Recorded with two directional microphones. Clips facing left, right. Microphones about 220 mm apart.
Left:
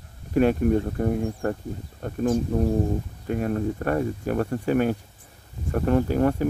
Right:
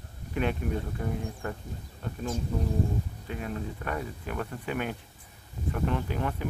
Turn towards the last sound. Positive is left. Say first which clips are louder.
# left 9 dB
turn(degrees=45)  # may be behind; listen again after turning